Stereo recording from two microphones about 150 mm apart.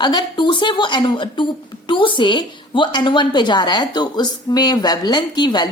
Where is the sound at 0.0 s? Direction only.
30° left (ahead or behind).